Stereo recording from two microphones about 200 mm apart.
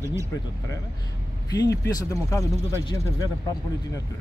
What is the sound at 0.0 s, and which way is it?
Speech, 15° right (ahead or behind).